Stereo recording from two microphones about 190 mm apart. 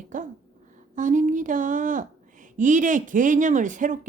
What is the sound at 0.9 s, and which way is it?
Speech, 40° right (ahead or behind).